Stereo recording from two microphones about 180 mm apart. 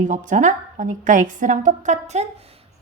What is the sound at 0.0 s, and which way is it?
A woman's voice, 45° right (ahead or behind).